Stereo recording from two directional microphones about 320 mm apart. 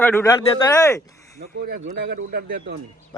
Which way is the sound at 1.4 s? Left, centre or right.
Right.